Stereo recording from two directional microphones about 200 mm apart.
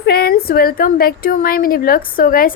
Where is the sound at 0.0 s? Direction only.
50° left (ahead or behind).